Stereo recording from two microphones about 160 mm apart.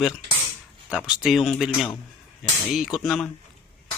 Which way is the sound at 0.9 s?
5° right (ahead or behind).